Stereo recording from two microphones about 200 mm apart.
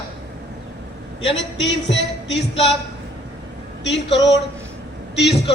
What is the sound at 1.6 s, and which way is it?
Music, 65° left (ahead or behind).